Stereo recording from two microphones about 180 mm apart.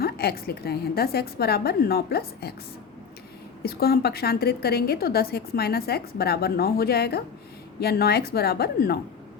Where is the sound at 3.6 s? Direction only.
60° left (ahead or behind).